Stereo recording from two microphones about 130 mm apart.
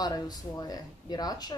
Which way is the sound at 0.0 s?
30° left (ahead or behind).